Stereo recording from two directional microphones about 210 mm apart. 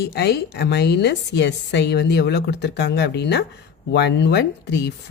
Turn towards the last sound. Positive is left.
turn(degrees=55)  # may be behind; listen again after turning